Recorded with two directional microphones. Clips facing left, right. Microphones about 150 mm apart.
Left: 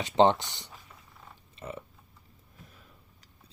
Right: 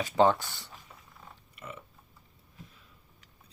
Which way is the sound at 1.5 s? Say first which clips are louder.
Left 5 dB; 35° left (ahead or behind).